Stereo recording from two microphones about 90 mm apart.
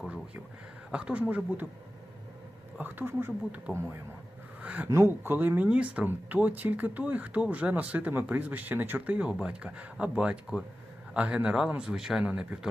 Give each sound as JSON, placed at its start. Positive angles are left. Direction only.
{"t": 0.9, "sound": "speech", "side_deg": -10}
{"t": 2.7, "sound": "speech", "side_deg": -20}
{"t": 4.6, "sound": "a sound", "side_deg": -15}
{"t": 4.9, "sound": "a man's voice", "side_deg": -30}